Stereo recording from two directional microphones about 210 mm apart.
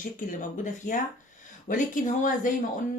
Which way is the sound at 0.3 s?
40° left (ahead or behind).